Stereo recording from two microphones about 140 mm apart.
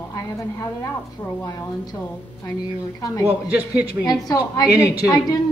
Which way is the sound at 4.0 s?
25° left (ahead or behind).